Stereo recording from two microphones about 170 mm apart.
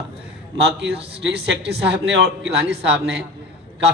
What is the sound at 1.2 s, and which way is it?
Speech, 90° right.